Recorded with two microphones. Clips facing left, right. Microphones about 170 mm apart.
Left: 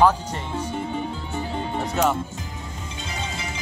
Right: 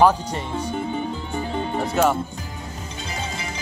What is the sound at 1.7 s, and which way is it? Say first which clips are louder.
Speech: right 2 dB; centre (ahead or behind).